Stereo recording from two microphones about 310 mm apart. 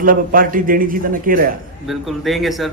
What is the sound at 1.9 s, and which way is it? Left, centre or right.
Speech, centre.